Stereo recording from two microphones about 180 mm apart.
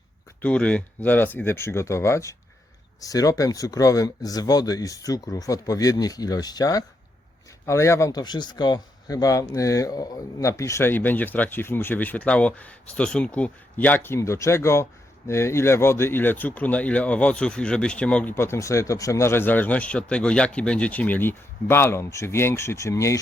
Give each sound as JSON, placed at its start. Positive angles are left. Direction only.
{"t": 0.4, "sound": "speech", "side_deg": 5}